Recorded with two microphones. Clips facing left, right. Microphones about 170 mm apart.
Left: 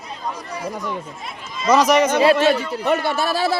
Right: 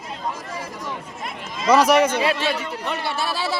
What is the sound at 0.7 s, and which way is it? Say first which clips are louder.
Speech: left 4 dB; 50° left (ahead or behind).